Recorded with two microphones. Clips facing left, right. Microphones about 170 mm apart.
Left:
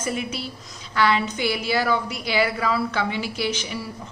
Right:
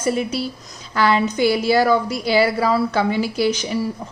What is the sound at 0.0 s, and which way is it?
A woman's voice, 35° right (ahead or behind).